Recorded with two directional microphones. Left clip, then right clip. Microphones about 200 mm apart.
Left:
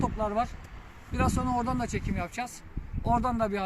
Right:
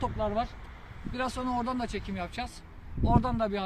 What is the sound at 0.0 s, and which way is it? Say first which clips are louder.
A man's voice: left 2 dB; centre (ahead or behind).